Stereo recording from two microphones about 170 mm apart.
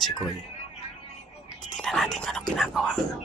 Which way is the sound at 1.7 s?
Centre (ahead or behind).